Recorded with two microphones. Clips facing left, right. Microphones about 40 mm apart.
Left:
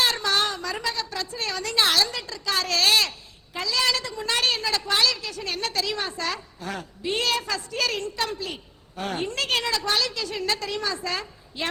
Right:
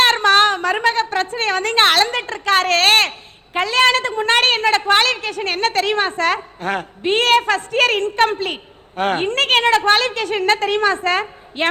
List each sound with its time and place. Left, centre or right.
0.0 s a woman's voice: right